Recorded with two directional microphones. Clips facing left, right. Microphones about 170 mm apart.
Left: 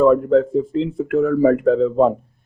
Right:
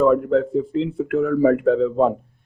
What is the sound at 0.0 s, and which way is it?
Speech, 40° left (ahead or behind).